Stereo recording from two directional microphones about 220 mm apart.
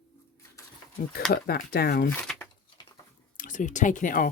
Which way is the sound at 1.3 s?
45° left (ahead or behind).